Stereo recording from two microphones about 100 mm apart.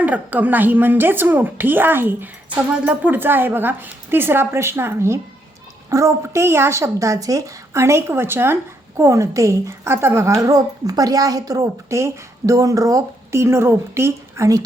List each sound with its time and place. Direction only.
0.0 s speech: 15° right (ahead or behind); by 14.6 s 30° right (ahead or behind)